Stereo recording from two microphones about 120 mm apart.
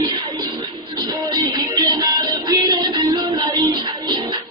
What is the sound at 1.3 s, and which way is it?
Music, 30° right (ahead or behind).